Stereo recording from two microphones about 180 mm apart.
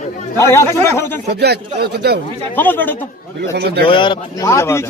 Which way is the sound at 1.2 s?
65° right (ahead or behind).